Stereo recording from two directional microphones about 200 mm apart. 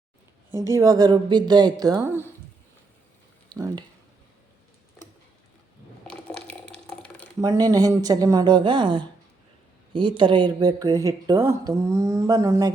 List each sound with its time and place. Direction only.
0.7 s speech: 15° right (ahead or behind)
3.5 s speech: 20° right (ahead or behind)
6.1 s water: 5° left (ahead or behind)
7.4 s speech: 15° right (ahead or behind)